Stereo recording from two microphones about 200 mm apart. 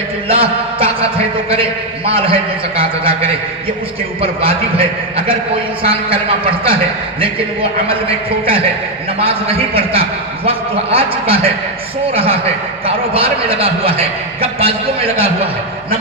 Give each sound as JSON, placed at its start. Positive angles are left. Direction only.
{"t": 0.3, "sound": "a man's voice", "side_deg": -30}